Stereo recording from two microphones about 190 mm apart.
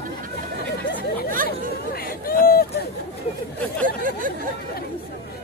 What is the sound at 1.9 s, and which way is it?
Chatter, 50° left (ahead or behind).